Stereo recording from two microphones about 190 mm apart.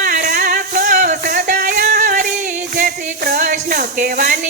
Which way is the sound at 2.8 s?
50° right (ahead or behind).